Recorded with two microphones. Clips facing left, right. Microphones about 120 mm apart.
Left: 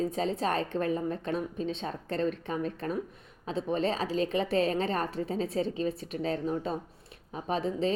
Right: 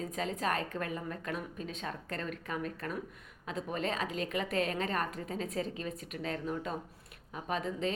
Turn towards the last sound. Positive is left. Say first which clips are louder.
# left 5 dB
turn(degrees=30)  # may be behind; listen again after turning